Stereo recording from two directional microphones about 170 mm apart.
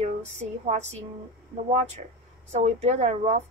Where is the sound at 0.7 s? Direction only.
40° right (ahead or behind).